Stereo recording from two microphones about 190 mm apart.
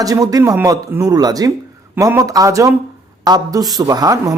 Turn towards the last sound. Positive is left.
turn(degrees=-20)  # may be behind; listen again after turning